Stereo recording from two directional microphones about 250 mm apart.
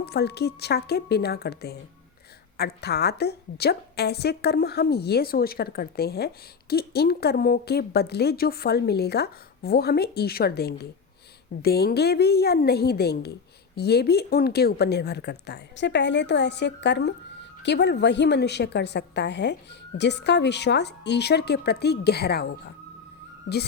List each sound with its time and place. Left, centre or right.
0.0 s a woman's voice: left